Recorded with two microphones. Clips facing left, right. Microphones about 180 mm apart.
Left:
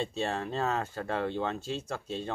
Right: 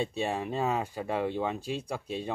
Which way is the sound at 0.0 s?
15° right (ahead or behind).